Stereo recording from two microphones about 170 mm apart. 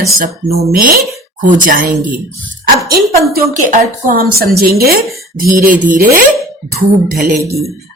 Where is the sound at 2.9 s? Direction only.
65° right (ahead or behind).